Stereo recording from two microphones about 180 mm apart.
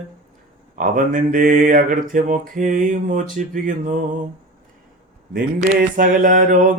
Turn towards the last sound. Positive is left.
turn(degrees=-45)  # may be behind; listen again after turning